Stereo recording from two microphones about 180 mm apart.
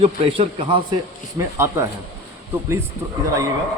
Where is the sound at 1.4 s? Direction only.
15° right (ahead or behind).